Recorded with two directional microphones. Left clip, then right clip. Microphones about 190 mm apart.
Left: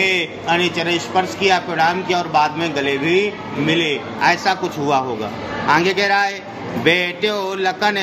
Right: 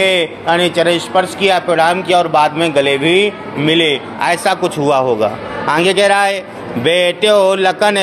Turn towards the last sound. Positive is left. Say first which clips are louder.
# right 6 dB
turn(degrees=-30)  # may be behind; listen again after turning